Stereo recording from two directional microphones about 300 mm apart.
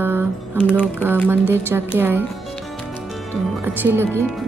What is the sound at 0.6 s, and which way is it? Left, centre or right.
Speech, centre.